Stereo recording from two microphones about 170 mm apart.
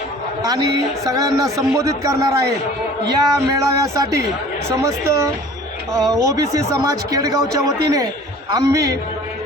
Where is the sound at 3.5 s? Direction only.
20° right (ahead or behind).